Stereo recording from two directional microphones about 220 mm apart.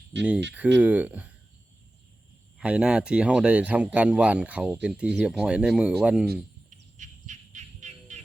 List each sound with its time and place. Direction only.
0.1 s speech: 55° right (ahead or behind)
0.5 s speech: 5° right (ahead or behind)
2.6 s speech: 5° right (ahead or behind)
6.7 s bird: 35° right (ahead or behind)